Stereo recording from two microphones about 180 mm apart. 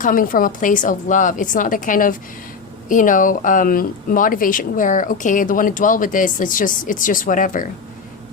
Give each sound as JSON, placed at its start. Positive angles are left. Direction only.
{"t": 0.0, "sound": "speech", "side_deg": 50}